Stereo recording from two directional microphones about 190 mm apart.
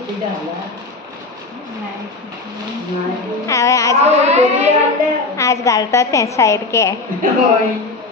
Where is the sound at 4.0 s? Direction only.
35° right (ahead or behind).